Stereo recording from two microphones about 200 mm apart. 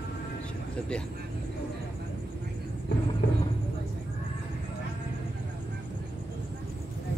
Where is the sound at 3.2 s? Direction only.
55° left (ahead or behind).